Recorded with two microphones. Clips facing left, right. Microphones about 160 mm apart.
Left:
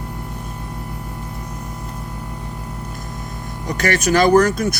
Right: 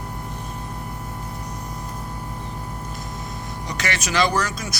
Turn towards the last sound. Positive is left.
turn(degrees=55)  # may be behind; listen again after turning